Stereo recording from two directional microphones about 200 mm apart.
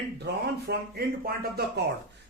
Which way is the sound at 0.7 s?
50° right (ahead or behind).